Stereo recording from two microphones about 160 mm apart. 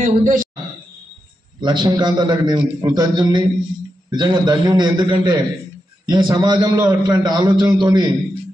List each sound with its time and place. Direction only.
0.0 s a man's voice: 55° right (ahead or behind)
1.6 s a man's voice: 25° right (ahead or behind)